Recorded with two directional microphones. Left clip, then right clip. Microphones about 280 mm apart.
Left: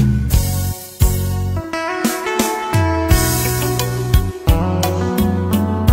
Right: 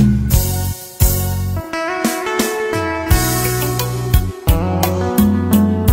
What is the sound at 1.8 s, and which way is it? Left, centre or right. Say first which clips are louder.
Music: right 1 dB; centre.